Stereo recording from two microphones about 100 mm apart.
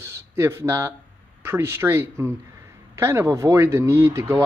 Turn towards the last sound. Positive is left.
turn(degrees=-25)  # may be behind; listen again after turning